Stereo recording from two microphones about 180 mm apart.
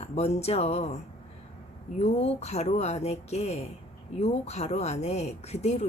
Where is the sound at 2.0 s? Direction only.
35° left (ahead or behind).